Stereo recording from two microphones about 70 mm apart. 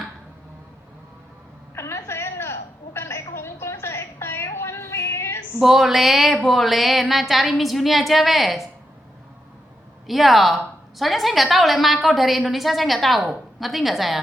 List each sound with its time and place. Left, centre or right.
1.7 s a sound: left
5.5 s a woman's voice: centre
10.1 s a woman's voice: centre